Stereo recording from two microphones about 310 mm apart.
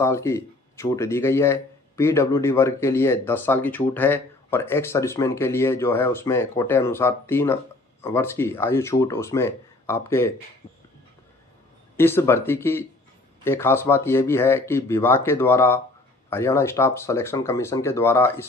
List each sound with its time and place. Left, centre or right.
0.0 s speech: centre
11.9 s speech: centre